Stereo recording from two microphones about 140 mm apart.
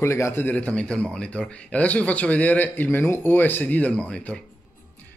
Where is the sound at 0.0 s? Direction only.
20° left (ahead or behind).